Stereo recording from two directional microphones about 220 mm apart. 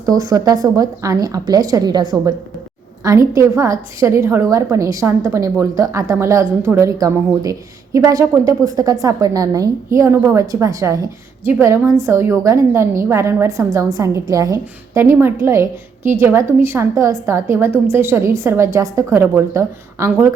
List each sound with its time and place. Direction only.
0.0 s a woman's voice: 15° right (ahead or behind)